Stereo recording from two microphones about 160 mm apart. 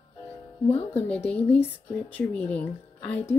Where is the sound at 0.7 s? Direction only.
10° left (ahead or behind).